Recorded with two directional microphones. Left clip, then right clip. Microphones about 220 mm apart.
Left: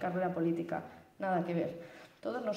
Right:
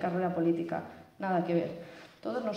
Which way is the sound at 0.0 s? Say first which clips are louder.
Right 3 dB; 55° left (ahead or behind).